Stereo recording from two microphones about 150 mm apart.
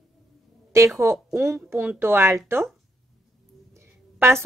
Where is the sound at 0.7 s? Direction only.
20° right (ahead or behind).